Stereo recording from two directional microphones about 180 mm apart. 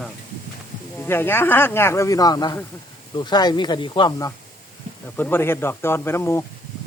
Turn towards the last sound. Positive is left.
turn(degrees=15)  # may be behind; listen again after turning